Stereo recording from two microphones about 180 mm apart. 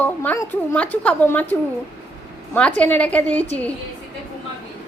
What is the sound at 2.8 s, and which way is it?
Speech, 10° left (ahead or behind).